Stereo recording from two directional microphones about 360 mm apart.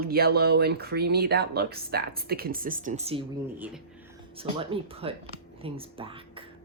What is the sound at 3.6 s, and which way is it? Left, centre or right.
Speech, centre.